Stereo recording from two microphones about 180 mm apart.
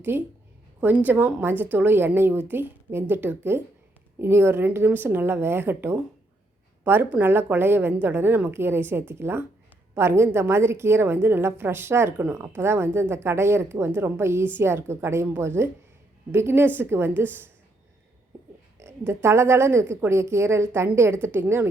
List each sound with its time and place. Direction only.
0.1 s a woman's voice: 10° right (ahead or behind)
18.8 s a woman's voice: 15° right (ahead or behind)